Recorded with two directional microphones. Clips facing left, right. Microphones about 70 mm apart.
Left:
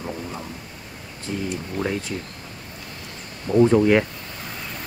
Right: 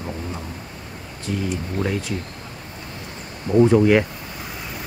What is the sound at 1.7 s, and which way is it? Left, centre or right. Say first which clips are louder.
Speech: even; centre.